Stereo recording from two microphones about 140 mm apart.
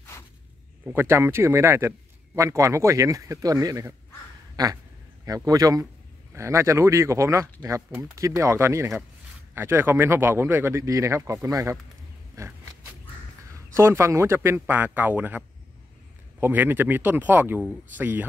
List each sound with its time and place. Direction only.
0.8 s a man's voice: 15° right (ahead or behind)
13.7 s a man's voice: 20° right (ahead or behind)